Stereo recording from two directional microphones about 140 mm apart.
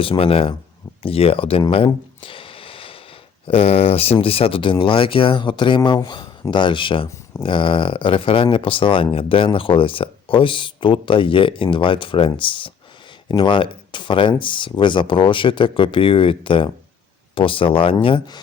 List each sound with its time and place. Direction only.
0.0 s speech: 40° left (ahead or behind)
1.7 s a sound: 40° left (ahead or behind)
3.4 s speech: 45° left (ahead or behind)